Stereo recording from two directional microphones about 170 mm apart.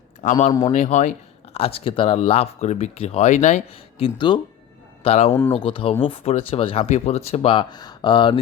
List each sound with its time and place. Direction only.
0.2 s speech: 45° left (ahead or behind)
1.5 s speech: 35° left (ahead or behind)
4.0 s speech: 30° left (ahead or behind)
5.0 s speech: 40° left (ahead or behind)